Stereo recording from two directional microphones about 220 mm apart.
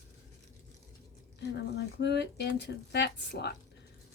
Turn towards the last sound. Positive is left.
turn(degrees=50)  # may be behind; listen again after turning